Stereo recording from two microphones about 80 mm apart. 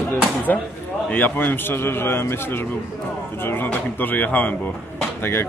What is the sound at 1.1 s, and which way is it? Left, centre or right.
Speech, left.